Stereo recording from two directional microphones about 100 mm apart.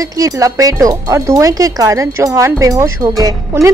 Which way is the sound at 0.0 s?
35° right (ahead or behind).